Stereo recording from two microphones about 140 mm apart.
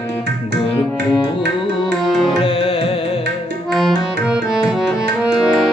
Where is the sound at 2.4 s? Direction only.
40° left (ahead or behind).